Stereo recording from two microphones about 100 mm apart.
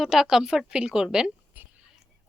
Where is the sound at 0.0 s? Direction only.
5° right (ahead or behind).